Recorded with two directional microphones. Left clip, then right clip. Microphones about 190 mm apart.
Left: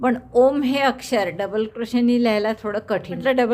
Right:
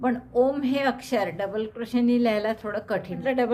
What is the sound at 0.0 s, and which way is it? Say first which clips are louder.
Speech: left 6 dB; 30° left (ahead or behind).